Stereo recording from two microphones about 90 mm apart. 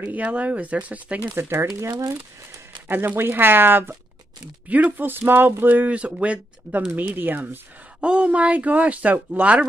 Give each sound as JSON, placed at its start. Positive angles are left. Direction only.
{"t": 0.0, "sound": "speech", "side_deg": -15}
{"t": 1.4, "sound": "speech", "side_deg": -30}
{"t": 2.9, "sound": "speech", "side_deg": -25}